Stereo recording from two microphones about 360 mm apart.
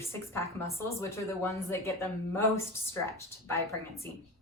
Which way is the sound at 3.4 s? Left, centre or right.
Centre.